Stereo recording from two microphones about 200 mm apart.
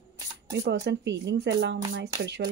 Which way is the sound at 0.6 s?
60° right (ahead or behind).